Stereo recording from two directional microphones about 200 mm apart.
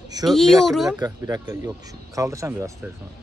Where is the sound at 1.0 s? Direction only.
20° right (ahead or behind).